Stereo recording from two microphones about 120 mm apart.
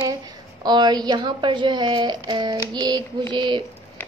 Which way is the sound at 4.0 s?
15° left (ahead or behind).